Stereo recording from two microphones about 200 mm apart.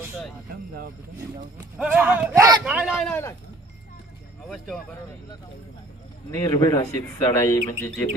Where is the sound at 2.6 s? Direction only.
5° right (ahead or behind).